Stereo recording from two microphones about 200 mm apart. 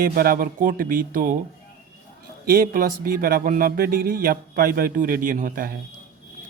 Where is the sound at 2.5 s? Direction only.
45° right (ahead or behind).